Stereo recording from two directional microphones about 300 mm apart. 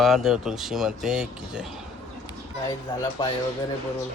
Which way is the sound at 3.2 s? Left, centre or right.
Centre.